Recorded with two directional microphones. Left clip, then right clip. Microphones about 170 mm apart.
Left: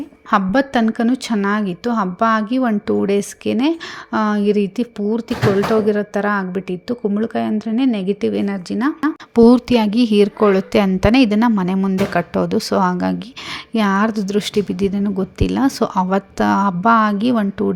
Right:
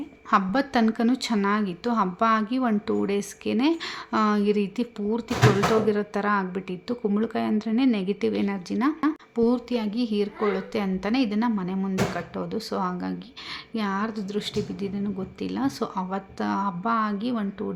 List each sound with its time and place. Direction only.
0.3 s a woman's voice: 30° left (ahead or behind)
9.3 s a woman's voice: 45° left (ahead or behind)